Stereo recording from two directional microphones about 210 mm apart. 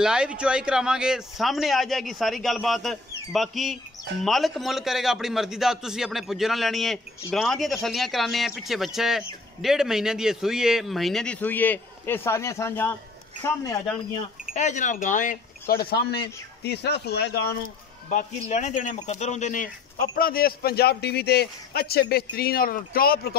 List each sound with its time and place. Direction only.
0.0 s a man's voice: 5° right (ahead or behind); by 12.9 s 10° left (ahead or behind)
14.5 s speech: 35° left (ahead or behind); by 17.6 s 50° left (ahead or behind)
18.1 s speech: 35° left (ahead or behind)